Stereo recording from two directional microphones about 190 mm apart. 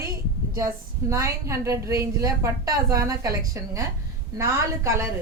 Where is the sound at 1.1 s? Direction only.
15° right (ahead or behind).